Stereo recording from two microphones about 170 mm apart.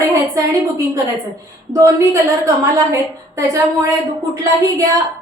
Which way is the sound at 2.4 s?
20° right (ahead or behind).